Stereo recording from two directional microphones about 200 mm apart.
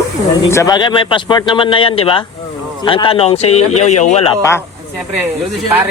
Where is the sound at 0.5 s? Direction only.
15° left (ahead or behind); by 4.3 s 35° left (ahead or behind).